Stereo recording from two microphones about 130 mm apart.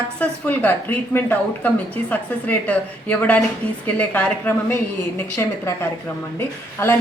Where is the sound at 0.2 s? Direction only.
10° left (ahead or behind).